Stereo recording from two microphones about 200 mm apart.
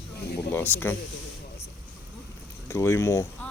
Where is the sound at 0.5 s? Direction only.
10° left (ahead or behind).